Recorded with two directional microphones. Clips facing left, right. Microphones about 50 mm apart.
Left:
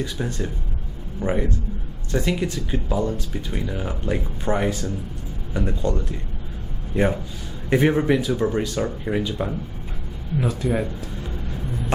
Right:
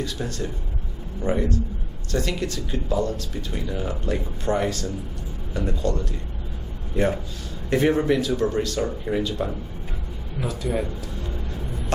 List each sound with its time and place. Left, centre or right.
0.0 s speech: centre
7.7 s speech: centre